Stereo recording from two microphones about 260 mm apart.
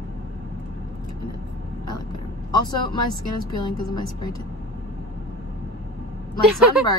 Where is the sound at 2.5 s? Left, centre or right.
Centre.